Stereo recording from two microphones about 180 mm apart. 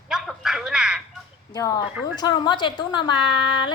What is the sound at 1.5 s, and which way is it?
Speech, 20° left (ahead or behind).